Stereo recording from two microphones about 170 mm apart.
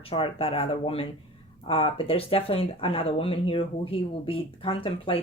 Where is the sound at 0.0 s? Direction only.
35° left (ahead or behind).